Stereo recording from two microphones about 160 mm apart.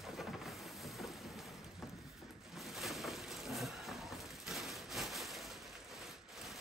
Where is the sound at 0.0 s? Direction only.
Centre (ahead or behind).